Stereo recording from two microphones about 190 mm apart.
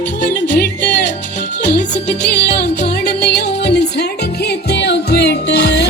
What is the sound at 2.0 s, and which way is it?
Music, 60° left (ahead or behind).